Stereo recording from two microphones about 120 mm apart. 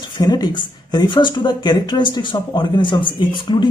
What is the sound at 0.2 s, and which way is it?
Speech, 35° left (ahead or behind).